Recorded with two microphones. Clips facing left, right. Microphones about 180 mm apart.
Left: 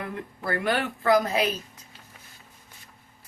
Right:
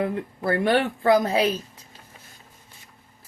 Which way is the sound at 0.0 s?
25° right (ahead or behind).